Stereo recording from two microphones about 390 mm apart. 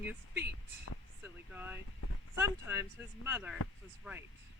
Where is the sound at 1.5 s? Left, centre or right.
Centre.